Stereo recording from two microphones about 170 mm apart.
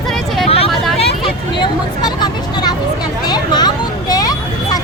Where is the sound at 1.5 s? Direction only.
25° left (ahead or behind).